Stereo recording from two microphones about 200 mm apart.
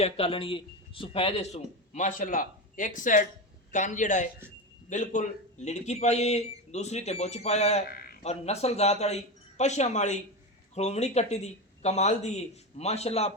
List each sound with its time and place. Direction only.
0.0 s speech: 25° left (ahead or behind)
7.9 s a sound: 50° left (ahead or behind)
8.2 s speech: 30° left (ahead or behind)